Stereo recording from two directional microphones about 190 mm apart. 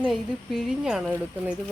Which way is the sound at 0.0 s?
Centre (ahead or behind).